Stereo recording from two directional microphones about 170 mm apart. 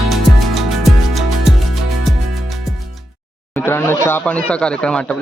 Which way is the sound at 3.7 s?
15° left (ahead or behind).